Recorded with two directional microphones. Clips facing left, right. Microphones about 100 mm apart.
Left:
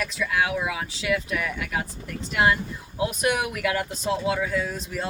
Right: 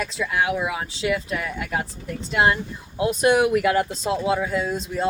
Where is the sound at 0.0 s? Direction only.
25° right (ahead or behind).